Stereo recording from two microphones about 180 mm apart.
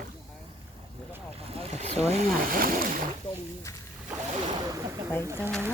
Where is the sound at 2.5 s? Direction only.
50° right (ahead or behind).